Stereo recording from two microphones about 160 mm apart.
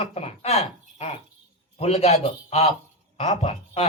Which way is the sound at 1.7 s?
40° left (ahead or behind).